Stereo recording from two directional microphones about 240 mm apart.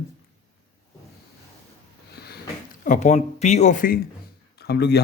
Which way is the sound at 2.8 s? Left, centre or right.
Left.